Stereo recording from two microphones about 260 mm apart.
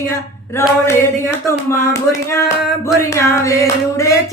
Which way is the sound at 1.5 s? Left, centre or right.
Centre.